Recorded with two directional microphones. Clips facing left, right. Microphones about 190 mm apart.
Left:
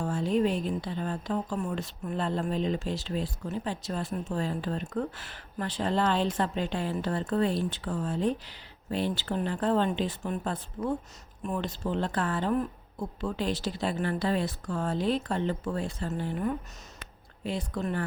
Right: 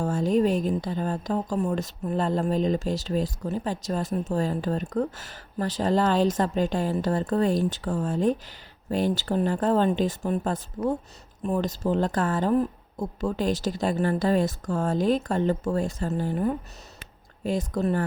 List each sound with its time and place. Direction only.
0.0 s a woman's voice: 40° right (ahead or behind)